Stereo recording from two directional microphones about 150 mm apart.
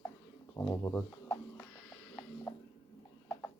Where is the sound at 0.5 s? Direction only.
20° left (ahead or behind).